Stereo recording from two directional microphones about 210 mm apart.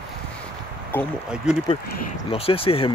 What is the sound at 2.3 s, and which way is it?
Speech, 25° left (ahead or behind).